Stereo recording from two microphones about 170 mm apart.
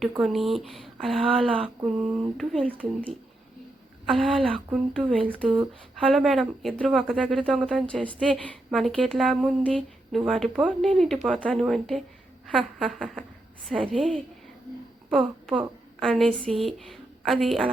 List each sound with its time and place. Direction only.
0.2 s a woman's voice: centre (ahead or behind)
1.5 s a sound: 30° right (ahead or behind)
1.8 s a woman's voice: centre (ahead or behind)
4.0 s a woman's voice: centre (ahead or behind)